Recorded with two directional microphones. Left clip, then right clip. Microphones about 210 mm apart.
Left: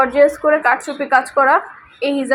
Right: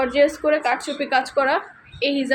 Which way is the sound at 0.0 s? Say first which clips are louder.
Left 5 dB; 5° left (ahead or behind).